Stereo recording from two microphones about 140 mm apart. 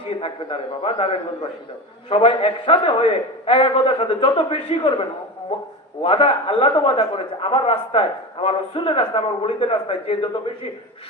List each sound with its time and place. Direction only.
0.1 s a man's voice: 40° left (ahead or behind)